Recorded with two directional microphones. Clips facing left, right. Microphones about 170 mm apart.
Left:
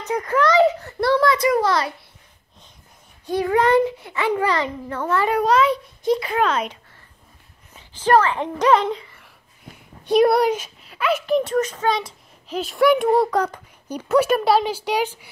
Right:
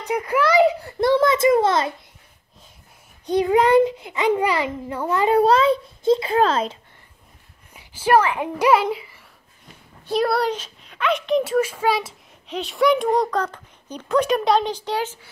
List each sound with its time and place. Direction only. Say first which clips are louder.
0.0 s a child's voice: left 1 dB; 10° right (ahead or behind)
3.3 s a child's voice: right 1 dB; 20° right (ahead or behind)
5.3 s a child's voice: right 4 dB; 30° right (ahead or behind)
7.7 s a child's voice: even; 10° right (ahead or behind)
10.0 s speech: left 5 dB; 15° left (ahead or behind)